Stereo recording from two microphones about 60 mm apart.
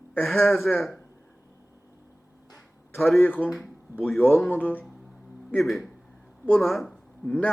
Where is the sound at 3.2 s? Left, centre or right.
Left.